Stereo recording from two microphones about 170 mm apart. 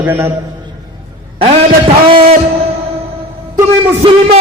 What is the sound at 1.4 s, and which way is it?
Speech, 30° right (ahead or behind).